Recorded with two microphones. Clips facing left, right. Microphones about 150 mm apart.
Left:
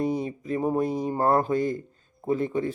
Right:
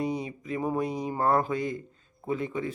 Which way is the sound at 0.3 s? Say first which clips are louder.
Left 4 dB; 40° left (ahead or behind).